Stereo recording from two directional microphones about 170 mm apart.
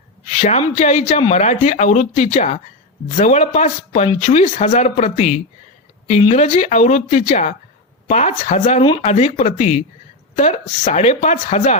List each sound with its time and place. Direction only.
0.3 s speech: 40° left (ahead or behind)